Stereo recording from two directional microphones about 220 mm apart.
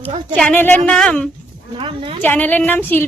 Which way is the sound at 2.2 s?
10° left (ahead or behind).